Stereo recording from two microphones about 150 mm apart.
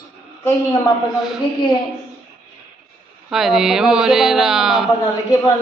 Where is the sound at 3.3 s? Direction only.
Centre (ahead or behind).